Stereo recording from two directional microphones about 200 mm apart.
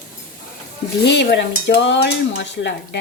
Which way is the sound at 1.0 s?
60° left (ahead or behind).